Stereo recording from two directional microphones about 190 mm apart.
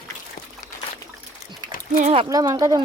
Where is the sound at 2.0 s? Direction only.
35° right (ahead or behind).